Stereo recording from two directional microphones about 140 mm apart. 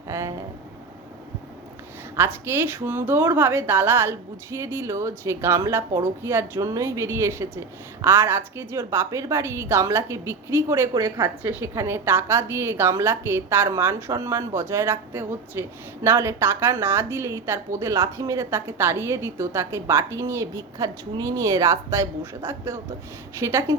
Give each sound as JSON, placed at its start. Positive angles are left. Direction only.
{"t": 0.1, "sound": "speech", "side_deg": -20}
{"t": 2.1, "sound": "a woman's voice", "side_deg": -15}